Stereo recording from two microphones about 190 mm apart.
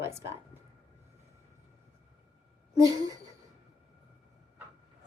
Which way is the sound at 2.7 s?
20° right (ahead or behind).